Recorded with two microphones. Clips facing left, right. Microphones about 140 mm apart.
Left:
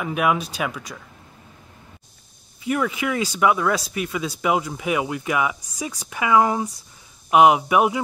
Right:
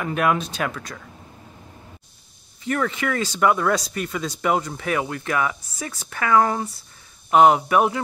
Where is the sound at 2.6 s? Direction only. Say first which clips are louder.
Left 1 dB; 10° left (ahead or behind).